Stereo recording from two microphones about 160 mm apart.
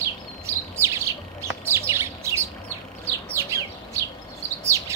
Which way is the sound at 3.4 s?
15° right (ahead or behind).